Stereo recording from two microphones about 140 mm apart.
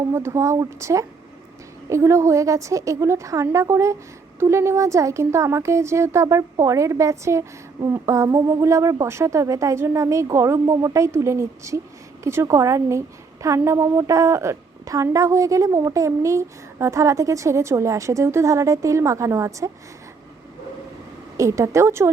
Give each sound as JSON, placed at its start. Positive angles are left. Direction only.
{"t": 0.1, "sound": "a woman's voice", "side_deg": -20}
{"t": 21.3, "sound": "a woman's voice", "side_deg": -20}